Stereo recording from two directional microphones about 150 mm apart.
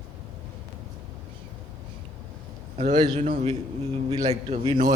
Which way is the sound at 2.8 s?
50° right (ahead or behind).